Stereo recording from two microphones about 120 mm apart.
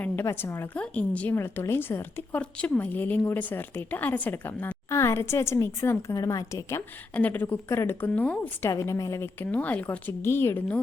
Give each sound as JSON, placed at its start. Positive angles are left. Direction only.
{"t": 0.0, "sound": "a woman's voice", "side_deg": 20}
{"t": 8.7, "sound": "a woman's voice", "side_deg": 25}